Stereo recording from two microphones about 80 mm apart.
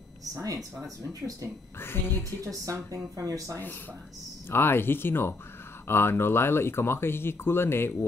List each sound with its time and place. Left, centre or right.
0.2 s speech: right
1.8 s speech: left
2.4 s a woman's voice: right
4.5 s speech: left